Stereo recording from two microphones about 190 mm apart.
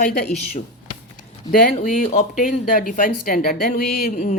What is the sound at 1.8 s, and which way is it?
Speech, 40° left (ahead or behind).